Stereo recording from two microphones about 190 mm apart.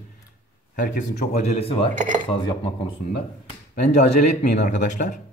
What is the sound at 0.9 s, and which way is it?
Speech, 35° left (ahead or behind).